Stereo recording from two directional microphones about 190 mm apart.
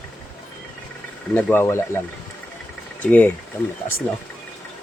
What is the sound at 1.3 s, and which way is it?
Speech, 10° left (ahead or behind).